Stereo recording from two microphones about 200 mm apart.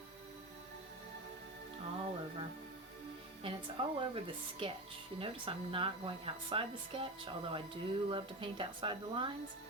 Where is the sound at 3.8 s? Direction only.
25° right (ahead or behind).